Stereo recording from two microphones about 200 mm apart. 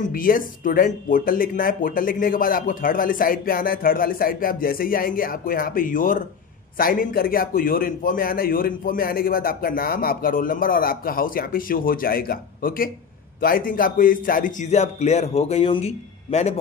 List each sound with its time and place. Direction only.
0.0 s a man's voice: 45° left (ahead or behind)